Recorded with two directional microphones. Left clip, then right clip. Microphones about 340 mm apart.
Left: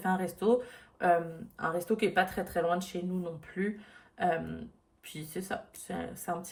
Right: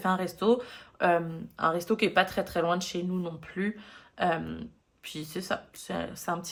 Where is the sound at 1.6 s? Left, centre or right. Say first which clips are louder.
Right 4 dB; centre.